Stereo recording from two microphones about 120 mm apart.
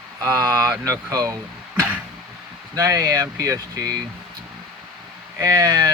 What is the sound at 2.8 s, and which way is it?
Speech, 25° right (ahead or behind).